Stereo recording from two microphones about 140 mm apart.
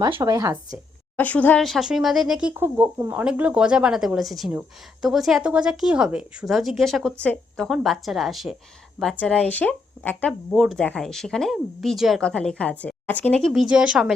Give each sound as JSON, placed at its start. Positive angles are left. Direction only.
{"t": 0.2, "sound": "speech", "side_deg": -25}
{"t": 1.1, "sound": "a woman's voice", "side_deg": 10}
{"t": 2.5, "sound": "a woman's voice", "side_deg": -15}
{"t": 10.5, "sound": "a woman's voice", "side_deg": 0}
{"t": 13.5, "sound": "a woman's voice", "side_deg": -5}